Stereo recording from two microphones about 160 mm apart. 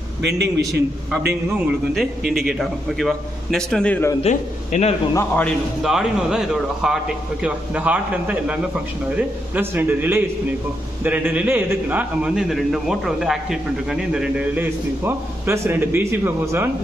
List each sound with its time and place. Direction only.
0.2 s a man's voice: 90° right
2.0 s a man's voice: centre (ahead or behind)
4.2 s a man's voice: 45° left (ahead or behind)
5.1 s a man's voice: 10° left (ahead or behind)
5.8 s a man's voice: centre (ahead or behind)